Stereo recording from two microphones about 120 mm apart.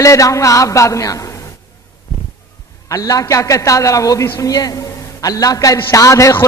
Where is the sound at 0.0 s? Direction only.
25° left (ahead or behind).